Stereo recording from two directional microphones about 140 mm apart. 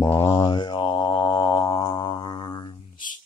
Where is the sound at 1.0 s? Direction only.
20° left (ahead or behind).